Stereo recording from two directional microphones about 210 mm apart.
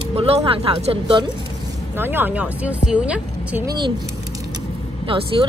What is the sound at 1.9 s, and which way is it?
Speech, 10° right (ahead or behind).